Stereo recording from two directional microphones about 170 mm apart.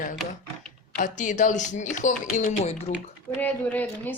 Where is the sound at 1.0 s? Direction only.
50° left (ahead or behind).